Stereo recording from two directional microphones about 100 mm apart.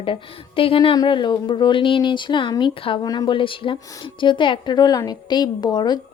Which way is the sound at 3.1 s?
40° left (ahead or behind).